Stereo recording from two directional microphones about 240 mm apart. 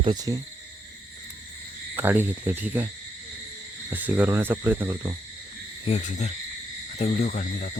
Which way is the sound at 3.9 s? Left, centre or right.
Centre.